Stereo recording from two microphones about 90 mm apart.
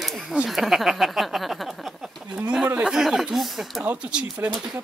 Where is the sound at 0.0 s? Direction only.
Centre (ahead or behind).